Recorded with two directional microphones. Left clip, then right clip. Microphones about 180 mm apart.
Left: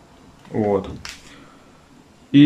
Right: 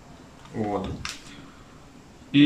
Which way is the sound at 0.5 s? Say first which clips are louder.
Left 9 dB; 35° left (ahead or behind).